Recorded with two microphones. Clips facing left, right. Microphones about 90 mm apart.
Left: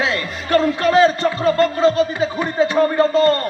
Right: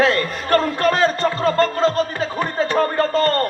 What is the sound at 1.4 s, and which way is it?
Speech, 15° left (ahead or behind).